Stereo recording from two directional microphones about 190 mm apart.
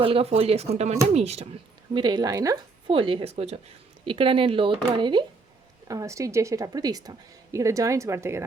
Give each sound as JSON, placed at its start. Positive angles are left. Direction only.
{"t": 0.0, "sound": "speech", "side_deg": -30}
{"t": 1.9, "sound": "a woman's voice", "side_deg": -20}